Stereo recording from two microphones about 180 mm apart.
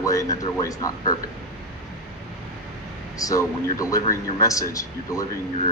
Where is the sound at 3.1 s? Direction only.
20° left (ahead or behind).